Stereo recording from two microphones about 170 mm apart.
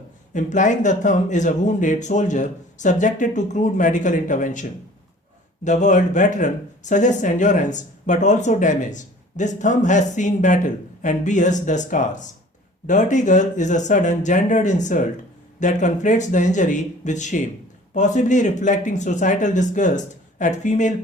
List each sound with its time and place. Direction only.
0.3 s speech: 45° left (ahead or behind)
5.6 s speech: 45° left (ahead or behind)